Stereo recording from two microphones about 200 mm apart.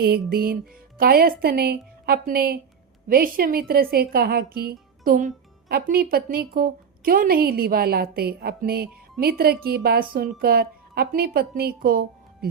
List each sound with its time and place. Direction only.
0.0 s speech: 50° right (ahead or behind)